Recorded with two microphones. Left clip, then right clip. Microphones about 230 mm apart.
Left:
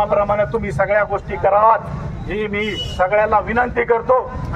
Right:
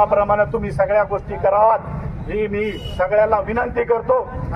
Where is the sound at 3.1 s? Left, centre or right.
Left.